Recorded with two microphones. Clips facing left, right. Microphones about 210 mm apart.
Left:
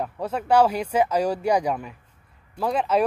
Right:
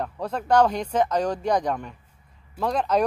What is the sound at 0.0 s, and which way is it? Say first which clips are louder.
Speech: left 1 dB; 5° left (ahead or behind).